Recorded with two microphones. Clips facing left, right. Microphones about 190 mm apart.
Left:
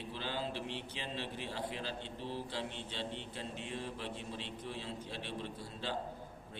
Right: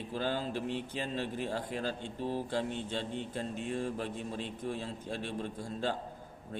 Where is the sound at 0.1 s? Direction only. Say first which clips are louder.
Right 7 dB; 45° right (ahead or behind).